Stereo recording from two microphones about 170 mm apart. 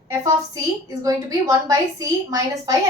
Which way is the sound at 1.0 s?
20° right (ahead or behind).